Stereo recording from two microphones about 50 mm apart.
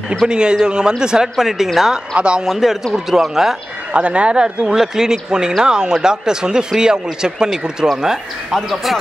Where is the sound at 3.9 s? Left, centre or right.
Right.